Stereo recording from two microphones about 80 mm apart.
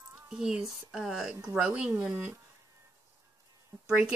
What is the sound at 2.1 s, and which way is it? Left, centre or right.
Speech, right.